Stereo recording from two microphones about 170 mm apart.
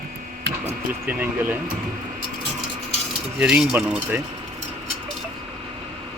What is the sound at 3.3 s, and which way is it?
Speech, 5° right (ahead or behind).